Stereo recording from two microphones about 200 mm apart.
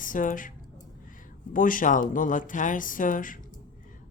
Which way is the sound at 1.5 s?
40° left (ahead or behind).